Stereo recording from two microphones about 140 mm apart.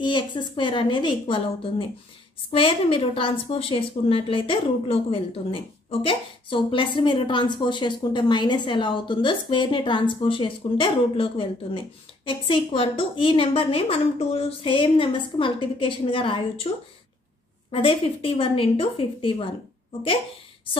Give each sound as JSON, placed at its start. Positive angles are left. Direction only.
{"t": 0.0, "sound": "a woman's voice", "side_deg": 35}